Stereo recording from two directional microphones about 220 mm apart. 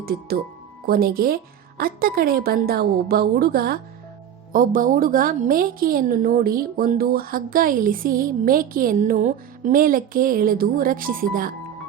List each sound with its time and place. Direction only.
0.0 s a woman's voice: 45° right (ahead or behind)